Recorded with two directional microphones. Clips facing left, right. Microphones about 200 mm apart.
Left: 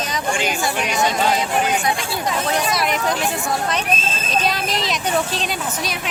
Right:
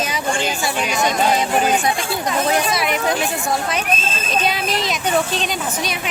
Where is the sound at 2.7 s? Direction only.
Centre (ahead or behind).